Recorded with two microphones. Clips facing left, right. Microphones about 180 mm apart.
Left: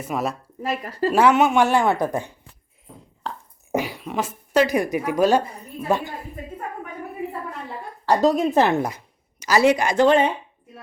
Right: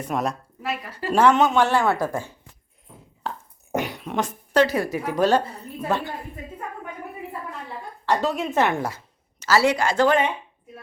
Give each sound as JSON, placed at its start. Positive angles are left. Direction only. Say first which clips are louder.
{"t": 0.0, "sound": "speech", "louder": "even", "side_deg": 5}
{"t": 0.8, "sound": "a woman's voice", "louder": "left 7 dB", "side_deg": 40}
{"t": 1.1, "sound": "speech", "louder": "even", "side_deg": 10}
{"t": 2.8, "sound": "a woman's voice", "louder": "even", "side_deg": 0}
{"t": 8.0, "sound": "a woman's voice", "louder": "left 5 dB", "side_deg": 35}
{"t": 9.4, "sound": "speech", "louder": "left 2 dB", "side_deg": 15}